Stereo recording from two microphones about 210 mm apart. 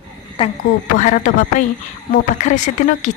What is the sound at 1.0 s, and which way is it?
A woman's voice, 40° left (ahead or behind).